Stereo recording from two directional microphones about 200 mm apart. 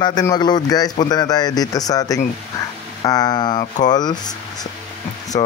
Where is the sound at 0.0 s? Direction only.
20° left (ahead or behind).